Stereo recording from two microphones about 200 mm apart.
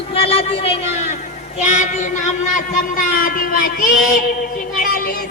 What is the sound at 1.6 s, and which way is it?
Child singing, 35° left (ahead or behind).